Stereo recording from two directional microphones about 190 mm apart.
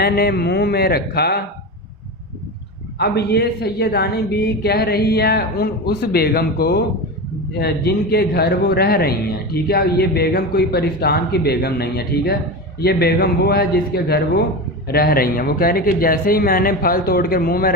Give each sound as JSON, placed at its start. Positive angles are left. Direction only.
{"t": 0.0, "sound": "speech", "side_deg": 55}
{"t": 3.0, "sound": "speech", "side_deg": 60}